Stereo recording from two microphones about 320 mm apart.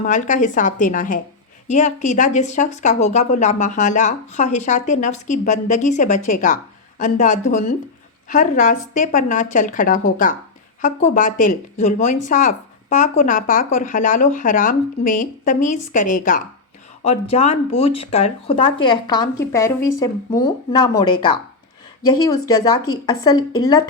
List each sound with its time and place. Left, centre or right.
0.0 s speech: left